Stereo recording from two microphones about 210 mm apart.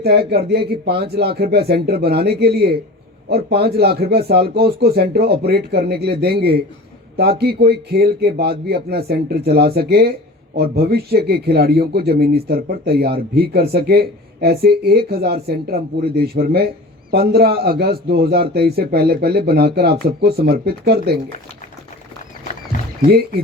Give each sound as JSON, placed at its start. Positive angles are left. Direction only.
{"t": 0.0, "sound": "speech", "side_deg": -50}
{"t": 23.0, "sound": "speech", "side_deg": -45}